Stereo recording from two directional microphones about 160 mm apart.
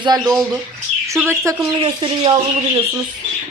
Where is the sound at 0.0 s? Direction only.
25° right (ahead or behind).